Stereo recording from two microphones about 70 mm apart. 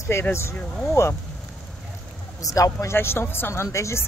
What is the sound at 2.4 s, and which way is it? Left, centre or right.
Speech, left.